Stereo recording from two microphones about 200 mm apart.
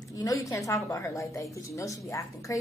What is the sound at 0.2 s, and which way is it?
A woman's voice, 15° left (ahead or behind).